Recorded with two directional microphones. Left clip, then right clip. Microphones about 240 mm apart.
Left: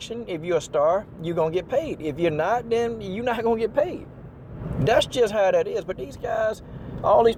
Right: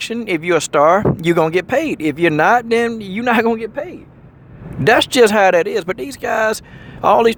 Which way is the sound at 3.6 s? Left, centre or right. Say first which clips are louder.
Left 2 dB; centre.